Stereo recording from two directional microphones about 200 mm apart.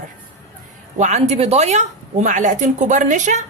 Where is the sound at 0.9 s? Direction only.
35° right (ahead or behind).